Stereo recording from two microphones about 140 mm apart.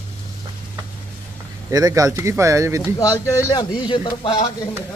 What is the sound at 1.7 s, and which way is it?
Speech, 25° right (ahead or behind).